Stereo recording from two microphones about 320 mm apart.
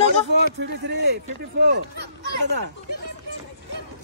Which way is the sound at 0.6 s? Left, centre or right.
Right.